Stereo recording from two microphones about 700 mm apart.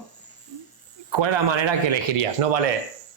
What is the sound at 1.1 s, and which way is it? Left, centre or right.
Speech, right.